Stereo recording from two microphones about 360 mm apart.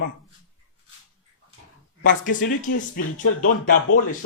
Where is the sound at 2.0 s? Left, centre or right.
Left.